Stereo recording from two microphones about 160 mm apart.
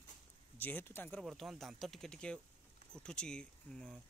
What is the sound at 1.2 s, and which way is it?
Speech, centre (ahead or behind).